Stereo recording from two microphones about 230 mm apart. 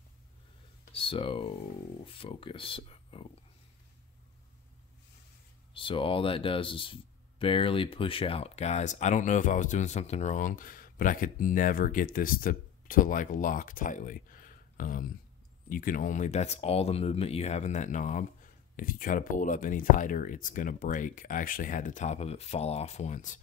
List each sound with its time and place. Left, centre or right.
0.9 s speech: left
5.7 s speech: left